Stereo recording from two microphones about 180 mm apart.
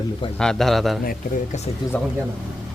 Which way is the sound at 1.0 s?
55° left (ahead or behind).